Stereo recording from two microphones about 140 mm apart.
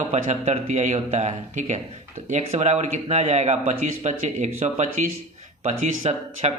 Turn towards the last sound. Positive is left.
turn(degrees=-55)  # may be behind; listen again after turning